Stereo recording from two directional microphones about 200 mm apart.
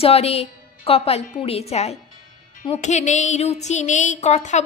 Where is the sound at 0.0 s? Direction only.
30° left (ahead or behind).